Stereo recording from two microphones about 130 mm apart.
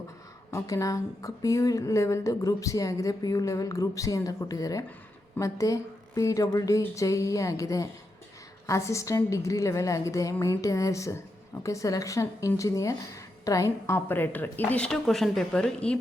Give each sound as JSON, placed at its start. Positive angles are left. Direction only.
{"t": 0.5, "sound": "a woman's voice", "side_deg": 25}
{"t": 14.8, "sound": "speech", "side_deg": 0}